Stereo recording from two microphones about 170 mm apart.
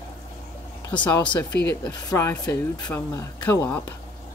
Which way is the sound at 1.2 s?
25° left (ahead or behind).